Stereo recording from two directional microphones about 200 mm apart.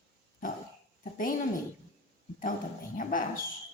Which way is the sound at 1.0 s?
45° left (ahead or behind).